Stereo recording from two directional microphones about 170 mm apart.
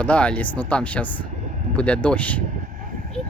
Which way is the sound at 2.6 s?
50° right (ahead or behind).